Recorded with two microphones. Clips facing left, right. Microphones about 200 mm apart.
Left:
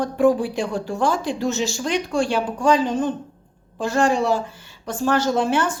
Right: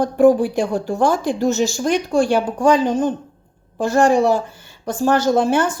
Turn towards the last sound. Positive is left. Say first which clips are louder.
# right 4 dB
turn(degrees=-40)  # may be behind; listen again after turning